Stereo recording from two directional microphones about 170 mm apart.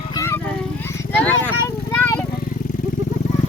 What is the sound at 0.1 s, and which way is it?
Vehicle, 15° left (ahead or behind).